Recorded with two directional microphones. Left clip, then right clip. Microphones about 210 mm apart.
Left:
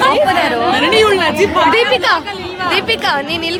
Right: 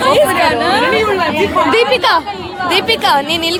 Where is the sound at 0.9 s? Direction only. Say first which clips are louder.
Left 2 dB; 45° left (ahead or behind).